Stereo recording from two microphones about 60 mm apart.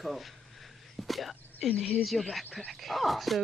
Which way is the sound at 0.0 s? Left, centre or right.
Centre.